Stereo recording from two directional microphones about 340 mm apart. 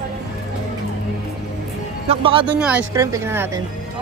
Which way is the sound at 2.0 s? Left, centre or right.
Centre.